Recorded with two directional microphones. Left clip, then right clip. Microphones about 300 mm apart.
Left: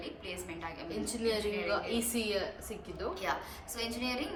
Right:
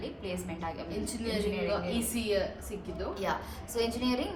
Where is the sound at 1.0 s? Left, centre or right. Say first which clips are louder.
Left 1 dB; centre.